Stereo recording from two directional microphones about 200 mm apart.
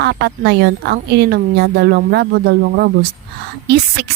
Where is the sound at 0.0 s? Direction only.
55° right (ahead or behind).